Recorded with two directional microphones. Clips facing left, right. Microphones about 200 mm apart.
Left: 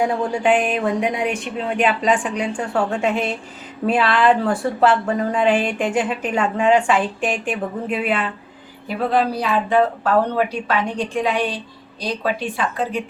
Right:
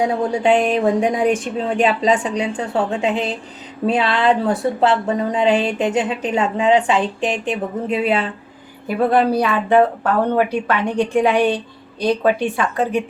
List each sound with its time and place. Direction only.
0.0 s speech: 20° right (ahead or behind)
9.1 s a woman's voice: 55° right (ahead or behind)